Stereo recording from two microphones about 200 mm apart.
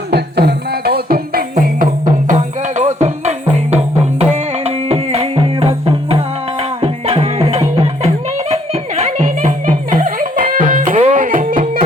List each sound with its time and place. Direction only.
0.1 s music: 55° right (ahead or behind)